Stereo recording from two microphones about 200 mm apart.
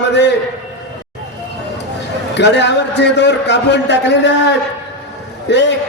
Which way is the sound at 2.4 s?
60° left (ahead or behind).